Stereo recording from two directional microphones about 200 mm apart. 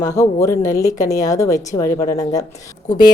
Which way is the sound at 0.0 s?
15° left (ahead or behind).